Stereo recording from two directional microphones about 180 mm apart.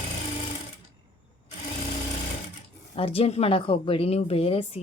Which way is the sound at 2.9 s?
30° left (ahead or behind).